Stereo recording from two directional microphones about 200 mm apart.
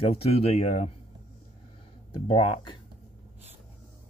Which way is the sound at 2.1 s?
30° left (ahead or behind).